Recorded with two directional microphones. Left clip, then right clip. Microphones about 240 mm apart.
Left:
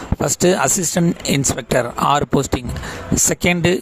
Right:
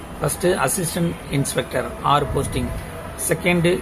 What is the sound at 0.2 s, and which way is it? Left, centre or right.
Speech, left.